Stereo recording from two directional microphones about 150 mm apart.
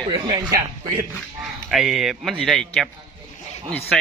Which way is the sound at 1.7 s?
Centre (ahead or behind).